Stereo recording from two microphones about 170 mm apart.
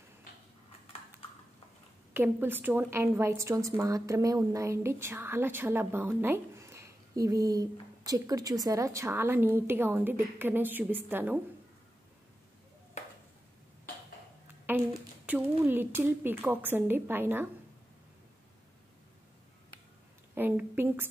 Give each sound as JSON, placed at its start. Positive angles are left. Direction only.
{"t": 2.1, "sound": "a woman's voice", "side_deg": -10}
{"t": 14.7, "sound": "a sound", "side_deg": -10}
{"t": 15.2, "sound": "a woman's voice", "side_deg": -10}
{"t": 20.3, "sound": "a woman's voice", "side_deg": -10}